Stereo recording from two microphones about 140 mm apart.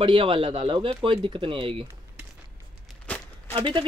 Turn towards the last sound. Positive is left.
turn(degrees=-35)  # may be behind; listen again after turning